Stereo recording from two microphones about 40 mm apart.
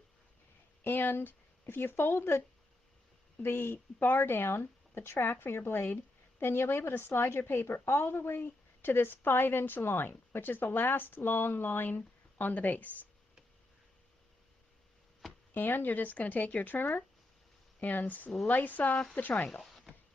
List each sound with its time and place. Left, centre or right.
0.8 s speech: left
3.4 s a woman's voice: left
15.5 s speech: left
19.6 s a sound: centre